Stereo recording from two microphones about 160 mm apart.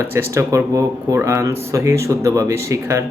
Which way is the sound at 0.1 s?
20° right (ahead or behind).